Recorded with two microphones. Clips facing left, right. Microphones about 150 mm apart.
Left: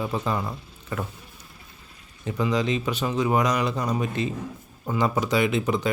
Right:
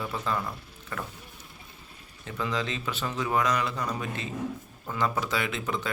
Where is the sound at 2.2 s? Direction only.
15° left (ahead or behind).